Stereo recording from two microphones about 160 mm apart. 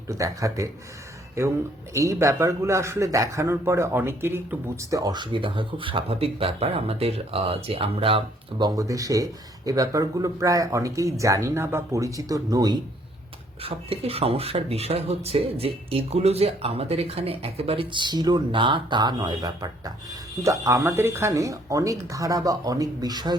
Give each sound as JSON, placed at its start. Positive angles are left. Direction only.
{"t": 0.1, "sound": "speech", "side_deg": -20}
{"t": 13.6, "sound": "speech", "side_deg": -35}